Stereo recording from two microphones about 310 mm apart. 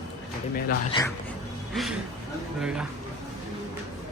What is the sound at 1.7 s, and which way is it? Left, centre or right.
A man's voice, centre.